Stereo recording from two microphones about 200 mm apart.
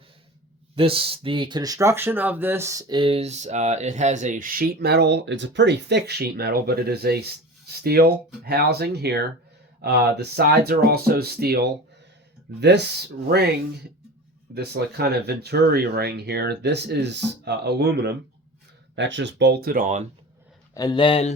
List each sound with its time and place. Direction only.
0.8 s speech: 25° right (ahead or behind); by 12.8 s 60° right (ahead or behind)
14.5 s speech: 55° right (ahead or behind)
18.9 s speech: 65° right (ahead or behind); by 20.1 s 40° right (ahead or behind)
20.7 s speech: 20° left (ahead or behind)